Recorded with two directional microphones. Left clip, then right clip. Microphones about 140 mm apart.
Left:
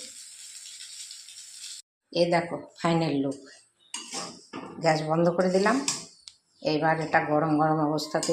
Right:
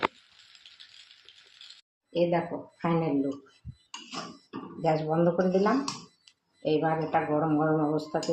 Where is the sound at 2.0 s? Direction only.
20° left (ahead or behind).